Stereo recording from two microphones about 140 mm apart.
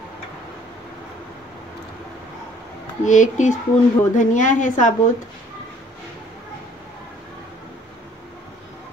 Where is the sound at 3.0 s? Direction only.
60° left (ahead or behind).